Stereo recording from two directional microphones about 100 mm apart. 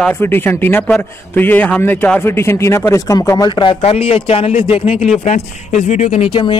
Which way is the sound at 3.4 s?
50° left (ahead or behind).